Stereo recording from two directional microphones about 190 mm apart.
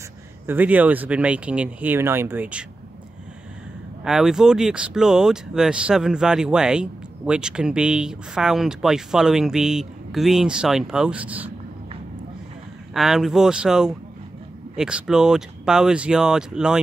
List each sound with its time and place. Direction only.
0.5 s speech: 10° right (ahead or behind)
4.0 s speech: 5° right (ahead or behind)
12.9 s speech: centre (ahead or behind)